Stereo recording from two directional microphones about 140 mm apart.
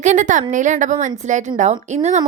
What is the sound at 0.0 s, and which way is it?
A woman's voice, 60° right (ahead or behind).